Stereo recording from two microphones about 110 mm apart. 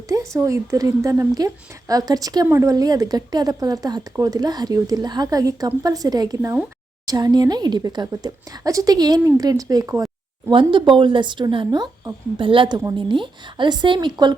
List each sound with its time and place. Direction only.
0.1 s speech: 30° right (ahead or behind)
10.5 s a woman's voice: 50° right (ahead or behind)